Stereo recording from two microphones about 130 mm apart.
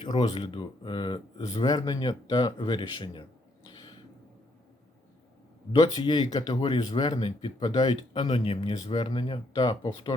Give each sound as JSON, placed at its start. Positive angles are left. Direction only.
{"t": 0.0, "sound": "speech", "side_deg": 35}
{"t": 5.9, "sound": "speech", "side_deg": 35}